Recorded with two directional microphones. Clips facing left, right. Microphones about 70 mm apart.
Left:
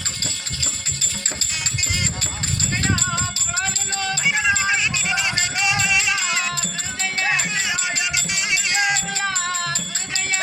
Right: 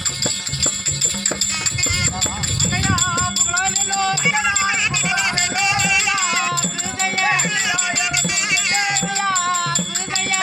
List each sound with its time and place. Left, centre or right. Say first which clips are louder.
3.9 s music: right 4 dB; right
8.7 s music: even; right